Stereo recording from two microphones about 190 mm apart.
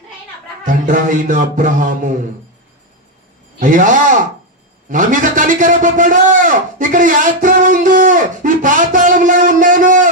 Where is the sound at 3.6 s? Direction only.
45° right (ahead or behind).